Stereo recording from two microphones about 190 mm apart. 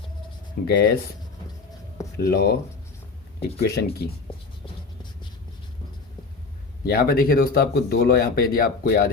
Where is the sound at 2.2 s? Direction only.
55° left (ahead or behind).